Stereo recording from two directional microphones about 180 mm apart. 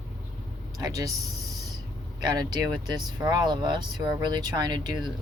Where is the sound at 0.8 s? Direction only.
20° right (ahead or behind).